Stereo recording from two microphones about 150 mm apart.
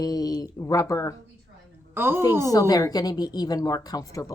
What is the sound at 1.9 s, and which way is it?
Speech, 15° right (ahead or behind).